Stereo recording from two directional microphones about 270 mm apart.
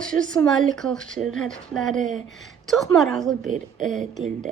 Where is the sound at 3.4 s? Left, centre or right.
Right.